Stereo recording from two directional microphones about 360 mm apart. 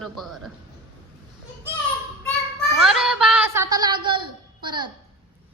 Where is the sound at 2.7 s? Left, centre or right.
Centre.